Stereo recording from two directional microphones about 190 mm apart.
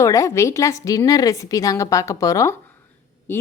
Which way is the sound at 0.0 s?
15° left (ahead or behind).